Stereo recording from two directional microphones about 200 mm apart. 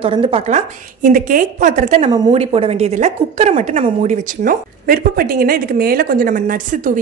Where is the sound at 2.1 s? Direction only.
25° right (ahead or behind).